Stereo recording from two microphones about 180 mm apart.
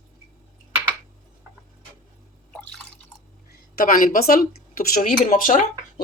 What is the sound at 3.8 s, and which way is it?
Speech, 50° left (ahead or behind).